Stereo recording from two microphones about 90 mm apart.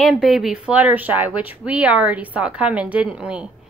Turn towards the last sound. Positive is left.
turn(degrees=-10)  # may be behind; listen again after turning